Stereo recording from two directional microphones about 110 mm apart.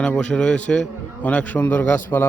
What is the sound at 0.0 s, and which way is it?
A man's voice, 10° left (ahead or behind).